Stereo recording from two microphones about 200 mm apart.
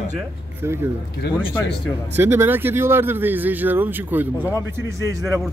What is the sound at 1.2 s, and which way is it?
Speech, 55° left (ahead or behind).